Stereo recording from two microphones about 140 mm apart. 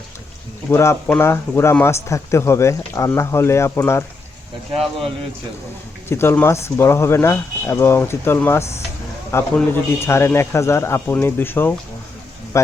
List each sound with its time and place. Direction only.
0.7 s speech: 20° left (ahead or behind)
6.1 s speech: 15° left (ahead or behind)